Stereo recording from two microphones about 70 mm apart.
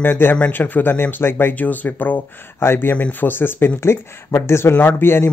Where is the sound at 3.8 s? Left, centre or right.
Left.